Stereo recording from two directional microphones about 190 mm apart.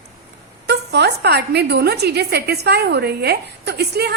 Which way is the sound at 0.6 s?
60° right (ahead or behind).